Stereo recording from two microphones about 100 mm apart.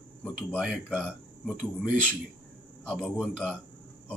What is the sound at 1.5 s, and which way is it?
Speech, 10° right (ahead or behind).